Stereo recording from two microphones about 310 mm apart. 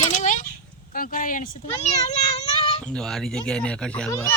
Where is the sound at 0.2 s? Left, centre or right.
Left.